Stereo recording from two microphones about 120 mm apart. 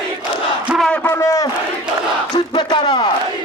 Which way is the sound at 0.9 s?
20° left (ahead or behind).